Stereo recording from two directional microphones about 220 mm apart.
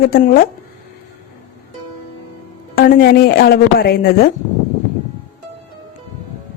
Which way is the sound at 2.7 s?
45° left (ahead or behind).